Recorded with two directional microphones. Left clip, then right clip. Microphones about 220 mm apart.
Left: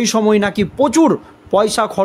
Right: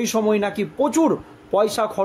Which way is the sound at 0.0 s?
40° left (ahead or behind).